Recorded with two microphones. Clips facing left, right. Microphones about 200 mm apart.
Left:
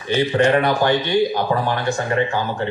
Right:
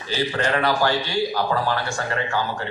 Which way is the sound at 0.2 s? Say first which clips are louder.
Left 6 dB; 25° left (ahead or behind).